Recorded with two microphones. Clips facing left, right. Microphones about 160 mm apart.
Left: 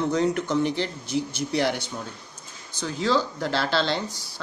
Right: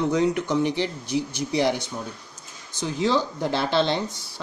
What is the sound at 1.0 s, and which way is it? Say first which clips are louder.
Speech: right 1 dB; 50° left (ahead or behind).